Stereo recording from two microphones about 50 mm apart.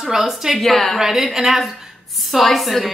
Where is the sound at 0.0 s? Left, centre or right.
Centre.